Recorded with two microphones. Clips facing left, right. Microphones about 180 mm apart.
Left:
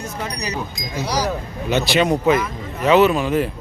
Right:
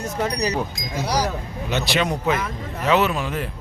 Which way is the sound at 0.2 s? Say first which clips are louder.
Right 5 dB; 40° right (ahead or behind).